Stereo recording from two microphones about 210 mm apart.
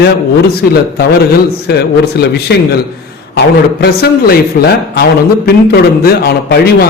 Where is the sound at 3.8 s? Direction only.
50° left (ahead or behind).